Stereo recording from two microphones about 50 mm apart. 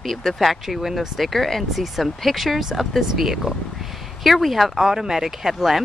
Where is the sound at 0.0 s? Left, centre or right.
Centre.